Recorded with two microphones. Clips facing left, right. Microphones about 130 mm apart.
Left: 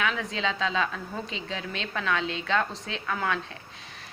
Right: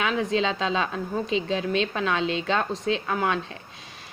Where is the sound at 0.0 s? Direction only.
20° right (ahead or behind).